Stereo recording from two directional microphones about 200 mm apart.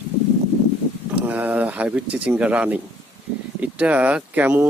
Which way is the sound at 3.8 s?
5° right (ahead or behind).